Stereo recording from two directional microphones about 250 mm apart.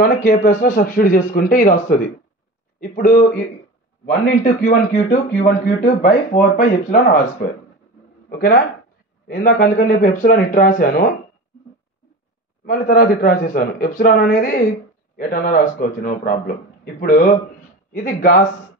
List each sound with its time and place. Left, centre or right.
0.0 s a man's voice: left
12.6 s a man's voice: left